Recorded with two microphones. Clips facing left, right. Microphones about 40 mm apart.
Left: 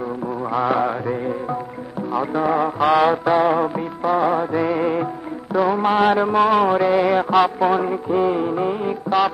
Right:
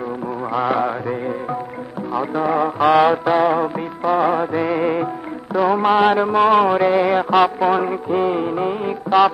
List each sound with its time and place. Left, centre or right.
0.4 s a sound: centre
2.1 s music: centre
4.0 s music of bollywood: centre
4.4 s music: centre
5.5 s music: centre